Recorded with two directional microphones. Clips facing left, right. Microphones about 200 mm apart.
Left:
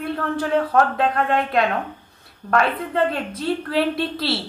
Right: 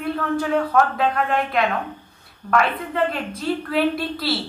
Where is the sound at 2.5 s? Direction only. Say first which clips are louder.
Left 1 dB; 30° left (ahead or behind).